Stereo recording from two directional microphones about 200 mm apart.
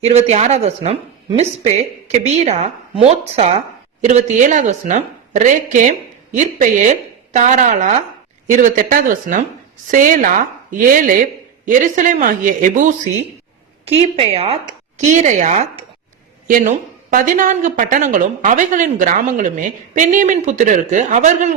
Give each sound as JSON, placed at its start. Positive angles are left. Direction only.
{"t": 0.0, "sound": "speech", "side_deg": -30}
{"t": 14.0, "sound": "speech", "side_deg": -30}